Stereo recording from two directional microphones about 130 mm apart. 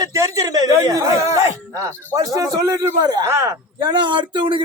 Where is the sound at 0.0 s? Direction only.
25° right (ahead or behind).